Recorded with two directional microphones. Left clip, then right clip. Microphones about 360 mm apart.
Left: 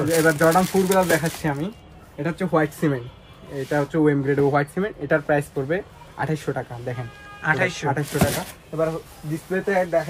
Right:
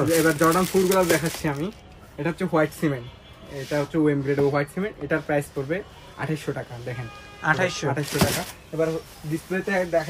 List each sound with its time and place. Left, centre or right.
0.1 s speech: centre
7.4 s speech: centre